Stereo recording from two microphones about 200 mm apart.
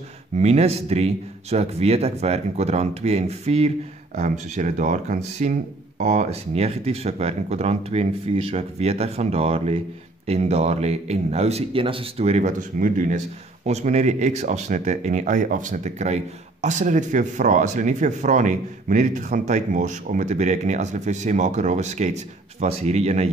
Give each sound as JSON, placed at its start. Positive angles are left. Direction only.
{"t": 0.4, "sound": "speech", "side_deg": -30}